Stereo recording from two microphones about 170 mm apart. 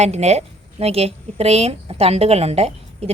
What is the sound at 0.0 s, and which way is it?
A woman's voice, 40° right (ahead or behind).